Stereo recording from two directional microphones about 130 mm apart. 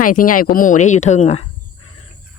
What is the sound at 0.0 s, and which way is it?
Speech, 90° left.